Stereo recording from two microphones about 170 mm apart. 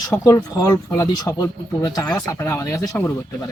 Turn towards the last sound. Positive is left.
turn(degrees=15)  # may be behind; listen again after turning